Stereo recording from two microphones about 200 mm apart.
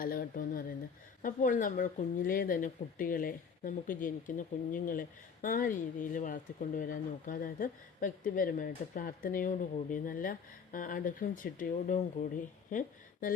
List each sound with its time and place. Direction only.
0.0 s speech: 45° left (ahead or behind)